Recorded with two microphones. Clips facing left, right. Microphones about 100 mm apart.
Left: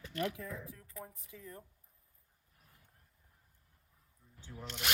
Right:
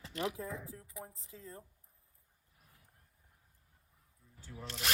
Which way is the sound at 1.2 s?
30° right (ahead or behind).